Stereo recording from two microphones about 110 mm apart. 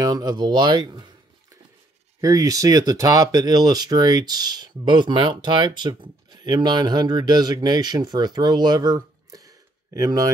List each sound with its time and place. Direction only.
0.0 s speech: 35° right (ahead or behind)
2.2 s speech: 30° right (ahead or behind)